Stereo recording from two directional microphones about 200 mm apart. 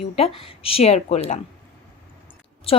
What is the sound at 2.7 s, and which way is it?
Speech, 30° left (ahead or behind).